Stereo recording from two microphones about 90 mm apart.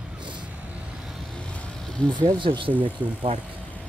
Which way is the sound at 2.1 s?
70° right (ahead or behind).